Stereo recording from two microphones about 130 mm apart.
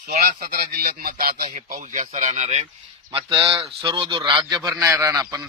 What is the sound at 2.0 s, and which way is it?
Speech, 60° right (ahead or behind).